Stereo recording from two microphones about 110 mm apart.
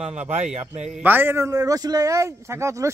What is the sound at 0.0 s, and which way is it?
Speech, 90° right.